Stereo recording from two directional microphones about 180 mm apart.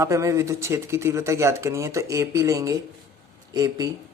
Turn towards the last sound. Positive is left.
turn(degrees=-20)  # may be behind; listen again after turning